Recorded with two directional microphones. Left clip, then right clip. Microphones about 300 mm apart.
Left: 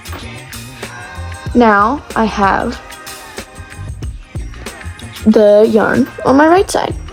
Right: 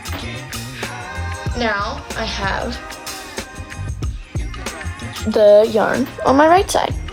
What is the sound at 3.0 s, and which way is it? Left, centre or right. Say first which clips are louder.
Music: even; centre.